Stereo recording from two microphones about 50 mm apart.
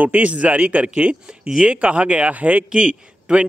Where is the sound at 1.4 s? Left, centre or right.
Centre.